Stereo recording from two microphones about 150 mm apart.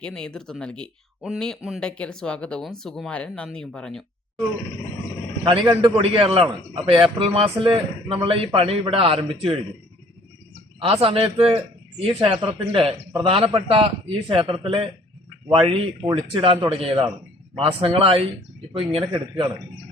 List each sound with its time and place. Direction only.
0.0 s speech: 5° left (ahead or behind)
5.5 s a man's voice: 30° right (ahead or behind)
10.8 s a man's voice: 40° right (ahead or behind)